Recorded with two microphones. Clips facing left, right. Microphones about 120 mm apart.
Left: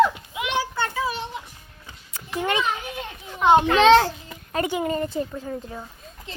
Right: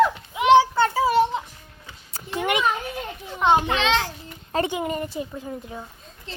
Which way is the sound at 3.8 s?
45° left (ahead or behind).